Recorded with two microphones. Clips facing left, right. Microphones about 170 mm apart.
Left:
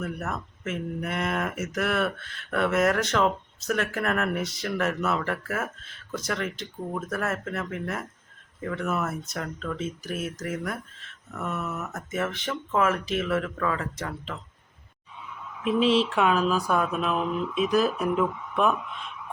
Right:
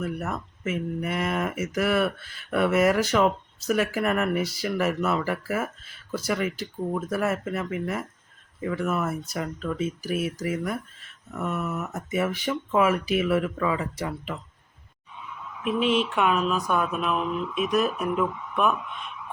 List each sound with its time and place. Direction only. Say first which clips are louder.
0.0 s speech: right 2 dB; 5° right (ahead or behind)
11.9 s speech: right 4 dB; 10° right (ahead or behind)
15.6 s speech: left 2 dB; 30° left (ahead or behind)